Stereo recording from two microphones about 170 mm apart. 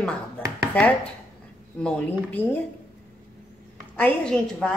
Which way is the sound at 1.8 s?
5° left (ahead or behind).